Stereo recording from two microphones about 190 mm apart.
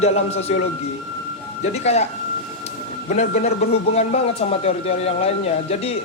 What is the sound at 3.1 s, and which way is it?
Speech, 35° left (ahead or behind).